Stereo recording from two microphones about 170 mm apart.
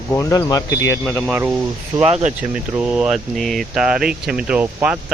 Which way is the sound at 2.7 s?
10° right (ahead or behind).